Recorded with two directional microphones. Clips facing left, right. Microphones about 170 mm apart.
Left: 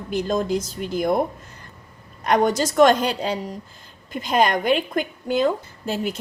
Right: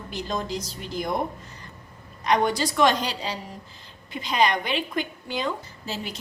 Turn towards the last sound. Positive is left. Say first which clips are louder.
# left 8 dB
turn(degrees=50)  # may be behind; listen again after turning